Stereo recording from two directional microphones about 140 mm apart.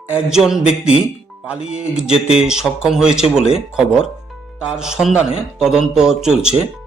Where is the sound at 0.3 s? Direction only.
5° right (ahead or behind).